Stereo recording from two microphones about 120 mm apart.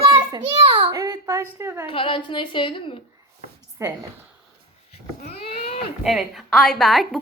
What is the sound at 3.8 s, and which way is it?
Speech, 25° right (ahead or behind).